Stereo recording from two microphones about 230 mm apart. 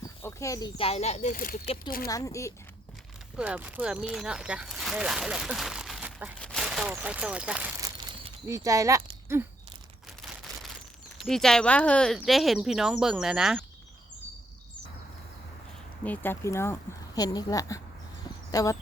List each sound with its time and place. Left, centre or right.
0.0 s speech: centre
2.0 s speech: centre
3.3 s speech: centre
6.4 s a sound: centre
10.2 s a sound: centre
11.2 s speech: centre
16.0 s speech: centre